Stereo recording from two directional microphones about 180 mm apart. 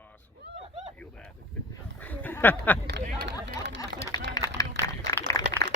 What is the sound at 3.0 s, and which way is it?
Run, 60° right (ahead or behind).